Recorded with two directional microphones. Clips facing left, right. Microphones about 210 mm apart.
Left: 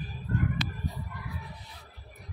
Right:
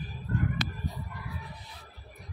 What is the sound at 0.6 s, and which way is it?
Chicken, 45° right (ahead or behind).